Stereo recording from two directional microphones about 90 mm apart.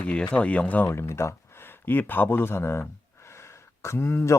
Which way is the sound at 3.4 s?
30° left (ahead or behind).